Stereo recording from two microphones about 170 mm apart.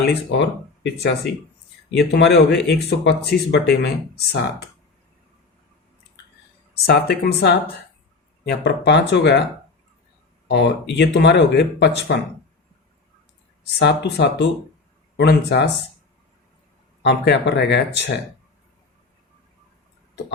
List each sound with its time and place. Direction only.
0.0 s speech: 85° left
6.8 s speech: 70° left (ahead or behind); by 9.4 s 90° left
10.5 s speech: 90° left
13.7 s speech: 85° left
17.0 s speech: 90° left